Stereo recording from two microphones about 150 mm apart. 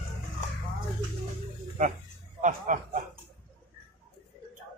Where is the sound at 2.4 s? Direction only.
55° right (ahead or behind).